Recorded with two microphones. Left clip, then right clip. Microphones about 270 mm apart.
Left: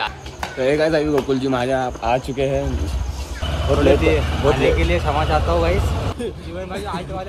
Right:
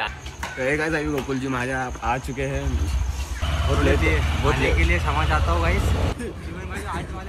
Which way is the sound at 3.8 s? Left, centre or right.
Centre.